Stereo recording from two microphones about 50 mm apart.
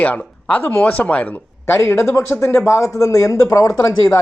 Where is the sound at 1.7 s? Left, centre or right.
Left.